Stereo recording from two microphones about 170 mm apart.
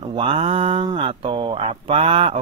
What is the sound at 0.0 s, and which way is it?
Speech, 30° right (ahead or behind).